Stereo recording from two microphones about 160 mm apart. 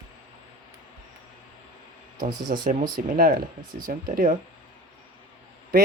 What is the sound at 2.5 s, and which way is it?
Speech, 60° right (ahead or behind).